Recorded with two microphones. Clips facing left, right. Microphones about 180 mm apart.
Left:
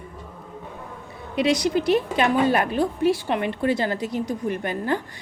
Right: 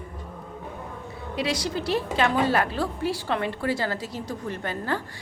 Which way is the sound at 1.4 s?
20° left (ahead or behind).